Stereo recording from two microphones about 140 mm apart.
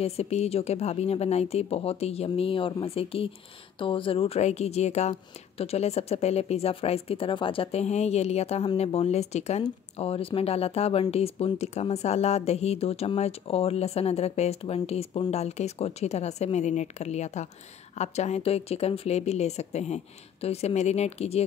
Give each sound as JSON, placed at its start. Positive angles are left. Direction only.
{"t": 0.0, "sound": "speech", "side_deg": 45}